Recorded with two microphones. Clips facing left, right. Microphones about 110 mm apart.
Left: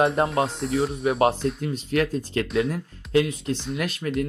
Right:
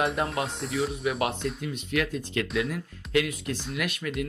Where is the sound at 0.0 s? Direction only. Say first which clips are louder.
Left 6 dB; 30° left (ahead or behind).